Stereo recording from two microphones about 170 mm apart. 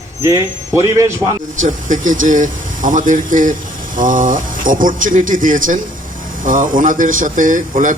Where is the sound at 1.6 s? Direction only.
50° right (ahead or behind).